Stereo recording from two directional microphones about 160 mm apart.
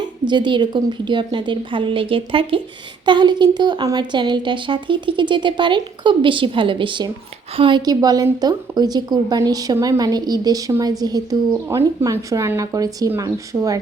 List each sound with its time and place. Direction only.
0.0 s a woman's voice: 30° right (ahead or behind)